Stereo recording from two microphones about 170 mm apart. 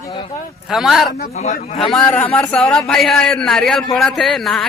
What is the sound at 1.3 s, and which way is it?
Speech, 40° left (ahead or behind).